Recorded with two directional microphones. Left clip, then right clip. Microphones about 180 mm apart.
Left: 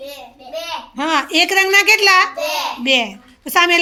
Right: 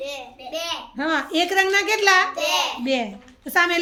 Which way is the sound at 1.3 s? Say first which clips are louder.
Left 6 dB; 15° left (ahead or behind).